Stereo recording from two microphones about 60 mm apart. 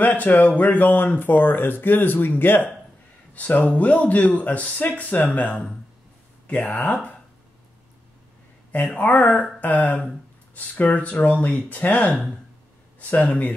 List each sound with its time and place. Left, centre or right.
0.0 s speech: left
8.7 s speech: left